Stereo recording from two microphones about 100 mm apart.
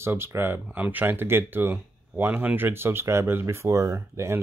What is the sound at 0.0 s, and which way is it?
Speech, 25° right (ahead or behind).